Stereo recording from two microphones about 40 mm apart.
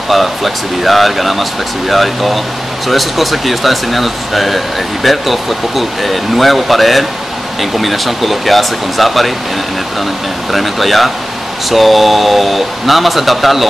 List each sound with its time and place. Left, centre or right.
0.1 s speech: centre
10.5 s speech: centre